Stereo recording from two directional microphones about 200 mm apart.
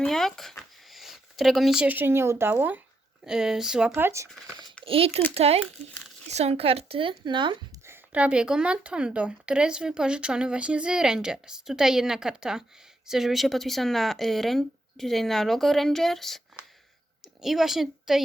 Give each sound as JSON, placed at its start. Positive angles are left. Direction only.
{"t": 0.0, "sound": "speech", "side_deg": 0}
{"t": 4.9, "sound": "speech", "side_deg": -30}
{"t": 7.9, "sound": "a woman's voice", "side_deg": -10}